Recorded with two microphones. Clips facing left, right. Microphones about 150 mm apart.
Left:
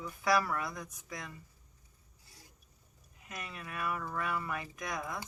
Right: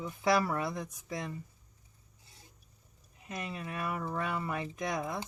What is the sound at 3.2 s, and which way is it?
Speech, 25° right (ahead or behind).